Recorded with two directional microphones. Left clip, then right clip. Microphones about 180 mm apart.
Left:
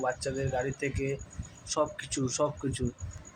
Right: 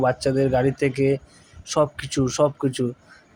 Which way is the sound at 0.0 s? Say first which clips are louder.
Right 11 dB; 30° right (ahead or behind).